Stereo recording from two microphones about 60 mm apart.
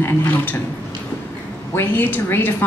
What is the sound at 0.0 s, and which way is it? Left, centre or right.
Speech, left.